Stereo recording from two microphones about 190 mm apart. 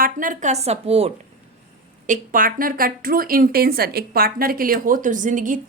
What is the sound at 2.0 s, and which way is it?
A woman's voice, 45° right (ahead or behind).